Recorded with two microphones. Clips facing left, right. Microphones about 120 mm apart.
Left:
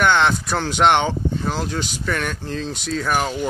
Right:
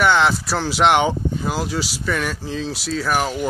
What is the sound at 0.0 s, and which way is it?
Speech, 5° right (ahead or behind).